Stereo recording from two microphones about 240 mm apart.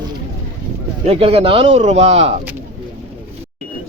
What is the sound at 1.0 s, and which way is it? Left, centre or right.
Speech, right.